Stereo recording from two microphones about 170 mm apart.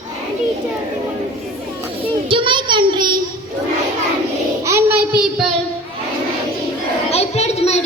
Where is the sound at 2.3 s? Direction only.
30° right (ahead or behind).